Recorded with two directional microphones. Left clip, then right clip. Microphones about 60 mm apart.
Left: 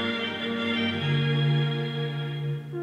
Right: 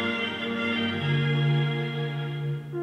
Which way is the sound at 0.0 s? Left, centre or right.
Right.